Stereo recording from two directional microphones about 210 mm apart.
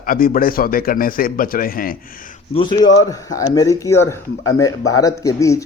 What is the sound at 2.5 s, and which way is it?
A man's voice, 25° left (ahead or behind).